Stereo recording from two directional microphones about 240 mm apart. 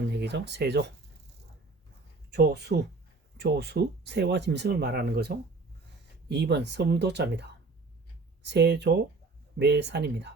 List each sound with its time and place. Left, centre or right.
0.1 s speech: right
2.3 s speech: right